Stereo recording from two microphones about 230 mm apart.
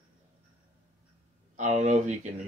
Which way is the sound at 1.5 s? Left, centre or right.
Right.